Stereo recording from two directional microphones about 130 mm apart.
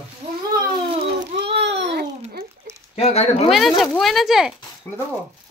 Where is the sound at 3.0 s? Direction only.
55° left (ahead or behind).